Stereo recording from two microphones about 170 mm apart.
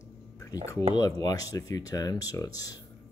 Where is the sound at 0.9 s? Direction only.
20° left (ahead or behind).